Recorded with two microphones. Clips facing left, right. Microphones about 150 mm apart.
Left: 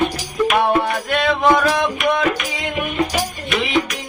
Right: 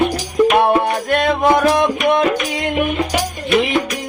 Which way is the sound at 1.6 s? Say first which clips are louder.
Right 4 dB; 55° right (ahead or behind).